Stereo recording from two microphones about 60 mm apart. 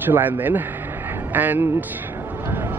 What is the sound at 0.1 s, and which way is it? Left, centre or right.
Speech, right.